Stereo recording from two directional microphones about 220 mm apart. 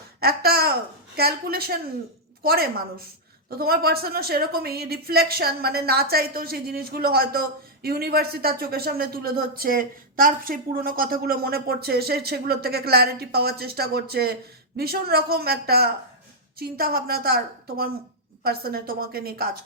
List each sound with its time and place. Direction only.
0.2 s a woman's voice: 45° right (ahead or behind)
18.4 s a woman's voice: 45° right (ahead or behind)